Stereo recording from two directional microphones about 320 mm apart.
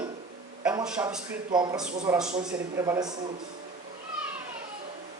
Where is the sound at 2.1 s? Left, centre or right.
Centre.